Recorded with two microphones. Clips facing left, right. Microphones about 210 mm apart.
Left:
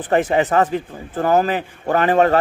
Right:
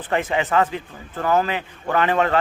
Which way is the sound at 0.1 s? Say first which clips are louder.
Left 5 dB; 40° left (ahead or behind).